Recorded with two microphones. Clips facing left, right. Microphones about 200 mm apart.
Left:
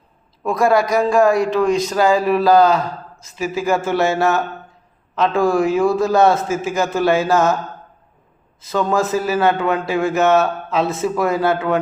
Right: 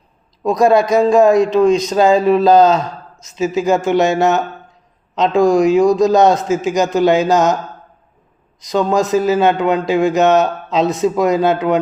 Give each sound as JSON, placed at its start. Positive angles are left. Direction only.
{"t": 0.4, "sound": "a man's voice", "side_deg": -20}
{"t": 8.6, "sound": "a man's voice", "side_deg": -15}